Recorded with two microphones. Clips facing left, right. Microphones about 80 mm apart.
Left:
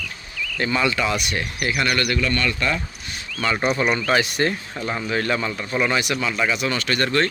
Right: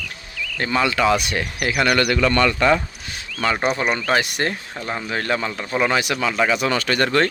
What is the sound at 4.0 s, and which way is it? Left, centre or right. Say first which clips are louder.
Speech: even; centre.